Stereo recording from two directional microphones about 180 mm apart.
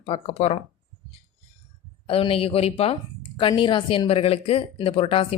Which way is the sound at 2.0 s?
30° left (ahead or behind).